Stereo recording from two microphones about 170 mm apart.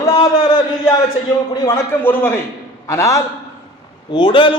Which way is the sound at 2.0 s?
10° left (ahead or behind).